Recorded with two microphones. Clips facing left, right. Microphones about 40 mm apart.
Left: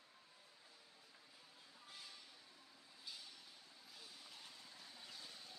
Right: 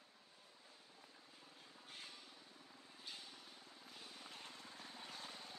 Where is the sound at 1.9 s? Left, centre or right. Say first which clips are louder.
Right 2 dB; right.